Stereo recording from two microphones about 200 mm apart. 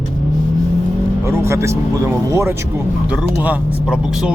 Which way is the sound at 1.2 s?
15° right (ahead or behind).